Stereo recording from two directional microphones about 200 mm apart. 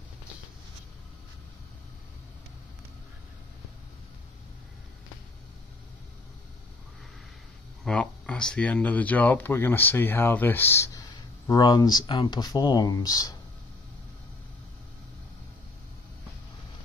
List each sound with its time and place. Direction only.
7.8 s speech: 5° left (ahead or behind)